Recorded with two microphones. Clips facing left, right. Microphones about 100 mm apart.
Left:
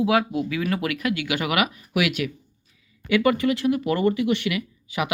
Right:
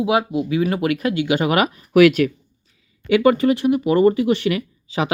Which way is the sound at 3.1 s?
30° right (ahead or behind).